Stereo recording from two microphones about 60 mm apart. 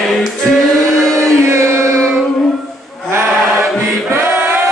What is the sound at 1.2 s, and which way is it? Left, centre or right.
Chant, right.